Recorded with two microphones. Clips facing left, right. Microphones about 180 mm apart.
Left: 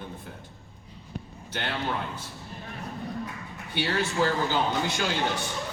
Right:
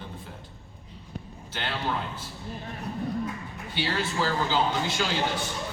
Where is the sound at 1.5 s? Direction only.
60° left (ahead or behind).